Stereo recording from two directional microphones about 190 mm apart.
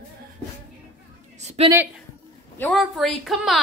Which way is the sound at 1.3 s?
35° right (ahead or behind).